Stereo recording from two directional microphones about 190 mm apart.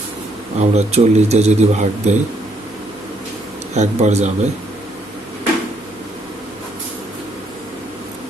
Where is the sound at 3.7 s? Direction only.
35° right (ahead or behind).